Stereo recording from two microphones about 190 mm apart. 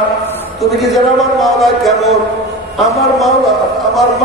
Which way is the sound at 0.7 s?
Centre (ahead or behind).